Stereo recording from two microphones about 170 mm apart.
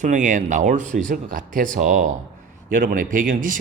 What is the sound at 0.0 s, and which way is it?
A man's voice, 50° right (ahead or behind).